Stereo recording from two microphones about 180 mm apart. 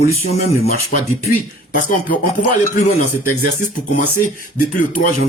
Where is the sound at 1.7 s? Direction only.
45° left (ahead or behind).